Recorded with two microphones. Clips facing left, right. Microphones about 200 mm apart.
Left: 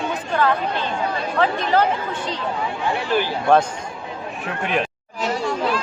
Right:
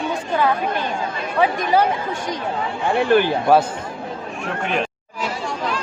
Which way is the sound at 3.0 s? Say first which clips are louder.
Right 7 dB; 55° right (ahead or behind).